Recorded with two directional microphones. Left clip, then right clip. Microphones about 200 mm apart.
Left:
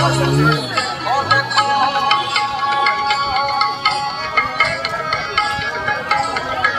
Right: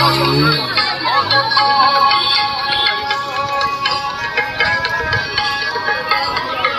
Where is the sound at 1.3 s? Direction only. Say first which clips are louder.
Right 2 dB; centre (ahead or behind).